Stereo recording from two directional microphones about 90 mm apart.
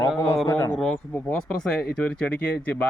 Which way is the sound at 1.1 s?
20° left (ahead or behind).